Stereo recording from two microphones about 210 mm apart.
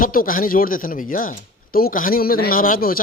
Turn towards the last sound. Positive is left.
turn(degrees=45)  # may be behind; listen again after turning